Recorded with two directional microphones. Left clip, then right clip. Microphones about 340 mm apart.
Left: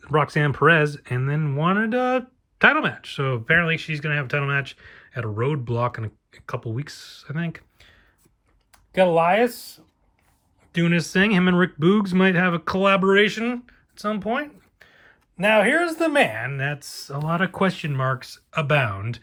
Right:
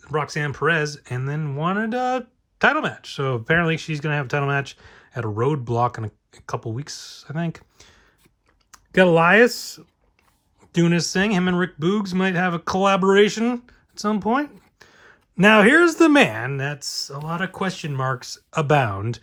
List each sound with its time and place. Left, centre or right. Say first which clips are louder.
0.0 s speech: left 4 dB; centre; by 9.5 s right
10.7 s speech: right 2 dB; centre